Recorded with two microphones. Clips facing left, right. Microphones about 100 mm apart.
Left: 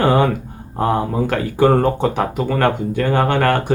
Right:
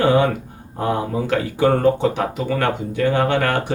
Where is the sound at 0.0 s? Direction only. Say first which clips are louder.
Left 1 dB; 50° left (ahead or behind).